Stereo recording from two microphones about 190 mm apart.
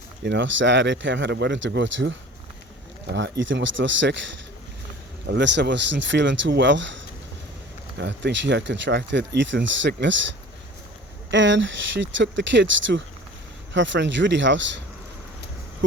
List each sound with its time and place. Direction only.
0.3 s speech: 70° right (ahead or behind)
3.1 s speech: 60° right (ahead or behind)
3.4 s speech: 75° right (ahead or behind)
11.3 s speech: 75° right (ahead or behind)